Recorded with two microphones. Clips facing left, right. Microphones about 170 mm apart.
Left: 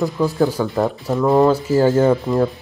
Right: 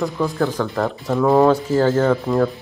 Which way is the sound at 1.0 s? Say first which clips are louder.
Right 1 dB; centre (ahead or behind).